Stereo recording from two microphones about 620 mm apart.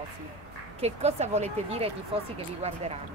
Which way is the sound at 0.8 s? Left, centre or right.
Centre.